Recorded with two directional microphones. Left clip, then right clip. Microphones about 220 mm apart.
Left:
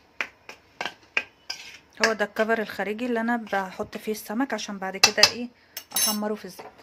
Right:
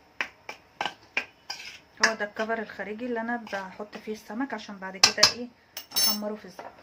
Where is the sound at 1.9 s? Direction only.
45° left (ahead or behind).